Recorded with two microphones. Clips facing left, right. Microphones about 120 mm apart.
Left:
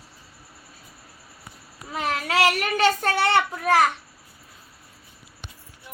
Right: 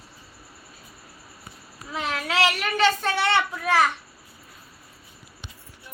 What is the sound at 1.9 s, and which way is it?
Child singing, 45° left (ahead or behind).